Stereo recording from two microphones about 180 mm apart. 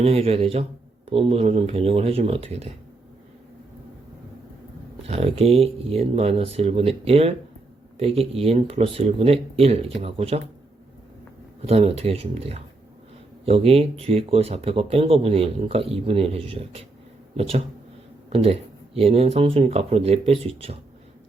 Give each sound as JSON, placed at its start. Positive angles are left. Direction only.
{"t": 0.0, "sound": "speech", "side_deg": -35}
{"t": 5.0, "sound": "speech", "side_deg": -35}
{"t": 11.6, "sound": "speech", "side_deg": -35}